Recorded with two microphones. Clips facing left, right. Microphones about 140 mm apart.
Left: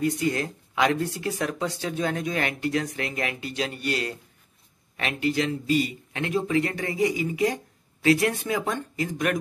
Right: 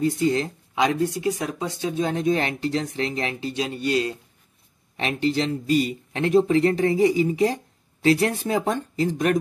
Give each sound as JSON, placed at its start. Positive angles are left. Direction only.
{"t": 0.0, "sound": "speech", "side_deg": -25}